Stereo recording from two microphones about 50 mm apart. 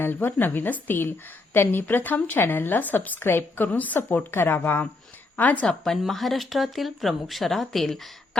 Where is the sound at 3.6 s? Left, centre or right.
Left.